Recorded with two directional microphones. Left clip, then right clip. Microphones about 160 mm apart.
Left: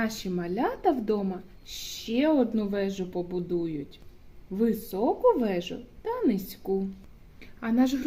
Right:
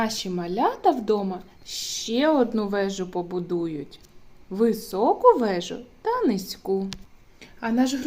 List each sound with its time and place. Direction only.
0.0 s a woman's voice: 25° left (ahead or behind)